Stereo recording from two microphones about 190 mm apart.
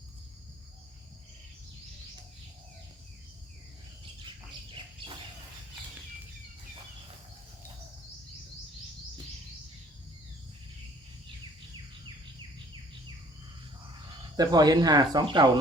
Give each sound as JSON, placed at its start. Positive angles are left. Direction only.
{"t": 14.3, "sound": "speech", "side_deg": -20}